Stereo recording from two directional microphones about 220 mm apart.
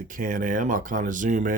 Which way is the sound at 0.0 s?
35° right (ahead or behind).